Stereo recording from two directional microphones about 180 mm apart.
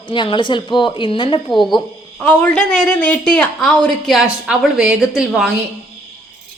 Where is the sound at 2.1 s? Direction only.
5° left (ahead or behind).